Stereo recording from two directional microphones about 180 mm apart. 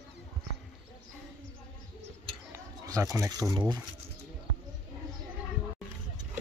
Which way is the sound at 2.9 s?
15° right (ahead or behind).